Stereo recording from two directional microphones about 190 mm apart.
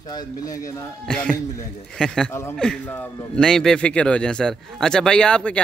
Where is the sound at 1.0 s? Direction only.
5° left (ahead or behind).